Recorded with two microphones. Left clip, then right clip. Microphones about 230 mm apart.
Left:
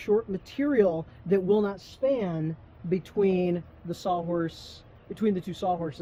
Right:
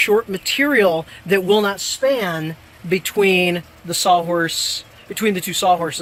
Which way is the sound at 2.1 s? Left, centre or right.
Centre.